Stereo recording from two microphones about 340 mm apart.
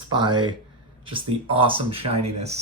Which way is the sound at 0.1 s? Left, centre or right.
Centre.